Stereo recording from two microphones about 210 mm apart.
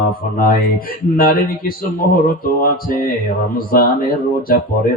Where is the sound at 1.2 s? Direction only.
45° left (ahead or behind).